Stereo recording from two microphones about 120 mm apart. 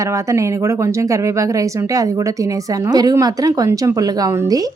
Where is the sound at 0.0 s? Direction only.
25° right (ahead or behind).